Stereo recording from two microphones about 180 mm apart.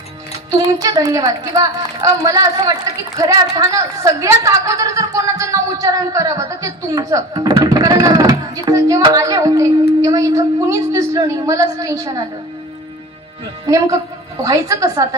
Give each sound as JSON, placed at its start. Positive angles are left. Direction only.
{"t": 0.8, "sound": "a woman's voice", "side_deg": -20}
{"t": 13.7, "sound": "a woman's voice", "side_deg": -20}